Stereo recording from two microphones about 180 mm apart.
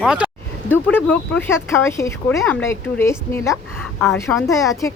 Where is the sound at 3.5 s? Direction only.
Centre (ahead or behind).